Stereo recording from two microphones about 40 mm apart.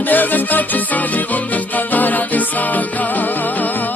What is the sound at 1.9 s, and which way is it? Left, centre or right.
Music, left.